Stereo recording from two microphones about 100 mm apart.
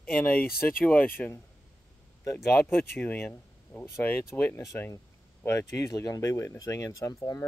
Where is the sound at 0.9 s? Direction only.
20° left (ahead or behind).